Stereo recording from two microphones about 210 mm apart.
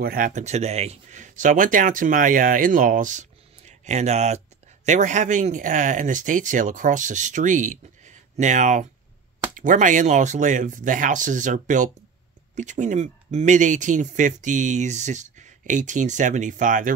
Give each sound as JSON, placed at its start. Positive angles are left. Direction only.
{"t": 0.0, "sound": "speech", "side_deg": -45}